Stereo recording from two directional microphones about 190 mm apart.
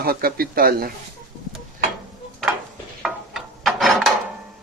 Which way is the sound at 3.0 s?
Centre (ahead or behind).